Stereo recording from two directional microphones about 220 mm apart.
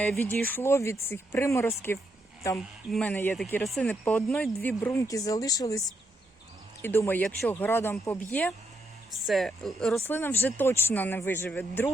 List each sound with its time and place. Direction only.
0.0 s speech: 5° left (ahead or behind)
6.8 s speech: 10° left (ahead or behind)